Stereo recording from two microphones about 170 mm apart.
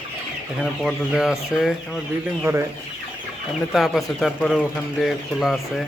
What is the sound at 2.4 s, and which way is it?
Speech, 15° right (ahead or behind).